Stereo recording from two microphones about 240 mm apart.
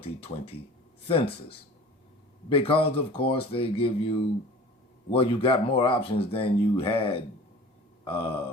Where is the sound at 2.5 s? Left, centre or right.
Left.